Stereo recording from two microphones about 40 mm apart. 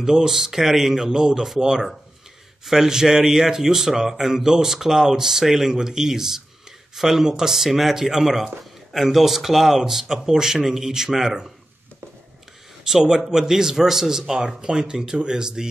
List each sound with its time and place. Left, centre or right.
0.0 s speech: centre
12.8 s speech: centre